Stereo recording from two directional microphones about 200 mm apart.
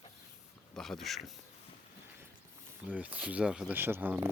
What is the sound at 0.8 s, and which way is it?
Speech, centre (ahead or behind).